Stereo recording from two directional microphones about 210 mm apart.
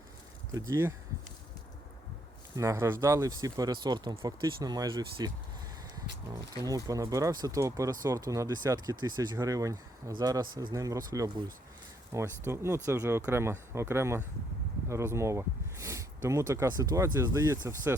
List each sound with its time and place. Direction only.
0.5 s speech: 15° right (ahead or behind)
2.6 s speech: 15° right (ahead or behind)
6.6 s speech: 15° right (ahead or behind)